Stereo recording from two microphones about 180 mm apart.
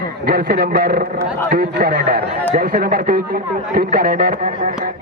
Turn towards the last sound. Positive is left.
turn(degrees=-55)  # may be behind; listen again after turning